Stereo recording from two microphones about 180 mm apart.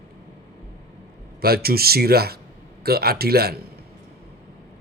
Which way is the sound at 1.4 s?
60° right (ahead or behind).